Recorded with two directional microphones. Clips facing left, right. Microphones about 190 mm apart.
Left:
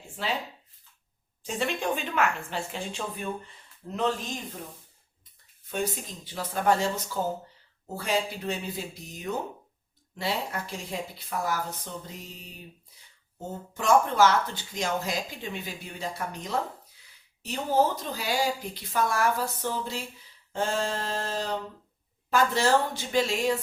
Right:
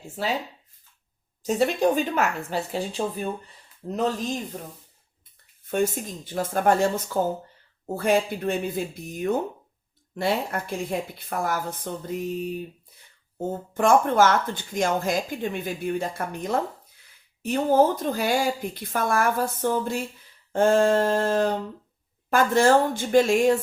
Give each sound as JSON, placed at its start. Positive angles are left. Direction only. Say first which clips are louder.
{"t": 0.2, "sound": "a woman's voice", "louder": "right 4 dB", "side_deg": -40}
{"t": 1.4, "sound": "a woman's voice", "louder": "right 8 dB", "side_deg": -40}
{"t": 5.6, "sound": "speech", "louder": "right 7 dB", "side_deg": -50}
{"t": 13.5, "sound": "speech", "louder": "right 3 dB", "side_deg": -50}